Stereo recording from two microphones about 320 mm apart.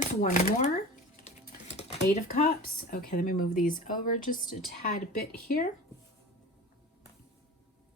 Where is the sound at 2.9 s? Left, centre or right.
Left.